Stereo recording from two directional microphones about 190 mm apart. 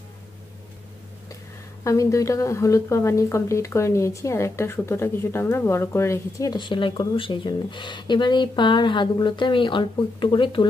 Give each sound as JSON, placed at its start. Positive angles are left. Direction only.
{"t": 1.9, "sound": "speech", "side_deg": 15}